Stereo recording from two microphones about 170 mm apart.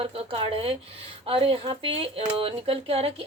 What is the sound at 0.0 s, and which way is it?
Speech, 35° right (ahead or behind).